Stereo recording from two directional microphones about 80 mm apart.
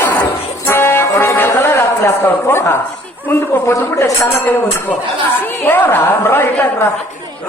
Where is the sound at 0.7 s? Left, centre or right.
Left.